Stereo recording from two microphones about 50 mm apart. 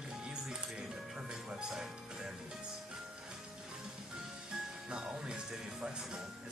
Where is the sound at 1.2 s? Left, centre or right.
Centre.